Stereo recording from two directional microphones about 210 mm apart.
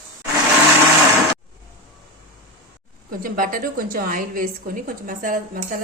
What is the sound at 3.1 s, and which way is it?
A woman's voice, 40° right (ahead or behind).